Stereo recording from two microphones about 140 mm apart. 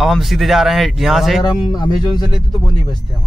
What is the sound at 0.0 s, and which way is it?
A man's voice, centre (ahead or behind).